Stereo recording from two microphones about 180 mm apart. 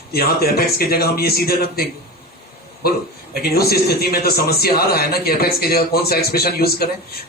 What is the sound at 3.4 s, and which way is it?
A man's voice, 60° left (ahead or behind).